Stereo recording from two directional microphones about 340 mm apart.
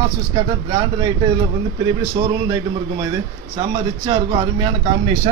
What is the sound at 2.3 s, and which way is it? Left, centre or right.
Speech, centre.